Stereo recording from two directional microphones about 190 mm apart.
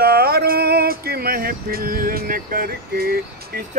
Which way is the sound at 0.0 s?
55° right (ahead or behind).